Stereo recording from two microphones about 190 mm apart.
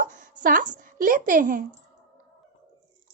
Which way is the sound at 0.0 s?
45° right (ahead or behind).